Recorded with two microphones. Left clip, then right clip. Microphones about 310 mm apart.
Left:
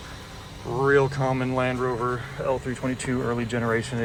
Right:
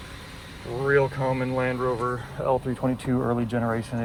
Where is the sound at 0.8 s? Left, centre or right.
Centre.